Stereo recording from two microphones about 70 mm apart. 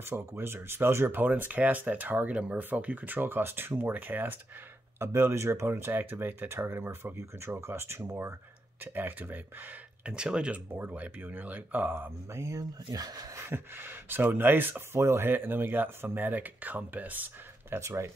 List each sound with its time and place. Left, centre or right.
0.0 s speech: right
10.0 s speech: centre
10.7 s speech: right
11.9 s speech: right
12.4 s speech: right
13.3 s speech: right
17.7 s speech: right